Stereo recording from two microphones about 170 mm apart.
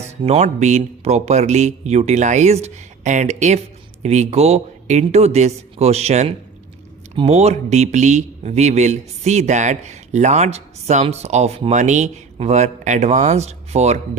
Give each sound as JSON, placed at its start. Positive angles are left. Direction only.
{"t": 0.3, "sound": "speech", "side_deg": -40}